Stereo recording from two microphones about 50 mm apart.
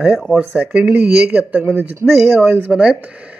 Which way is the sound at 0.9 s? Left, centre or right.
Right.